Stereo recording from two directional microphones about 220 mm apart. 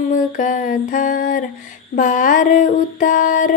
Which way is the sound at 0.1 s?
35° left (ahead or behind).